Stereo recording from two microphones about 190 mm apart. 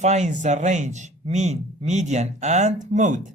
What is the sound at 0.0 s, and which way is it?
Speech, 35° right (ahead or behind).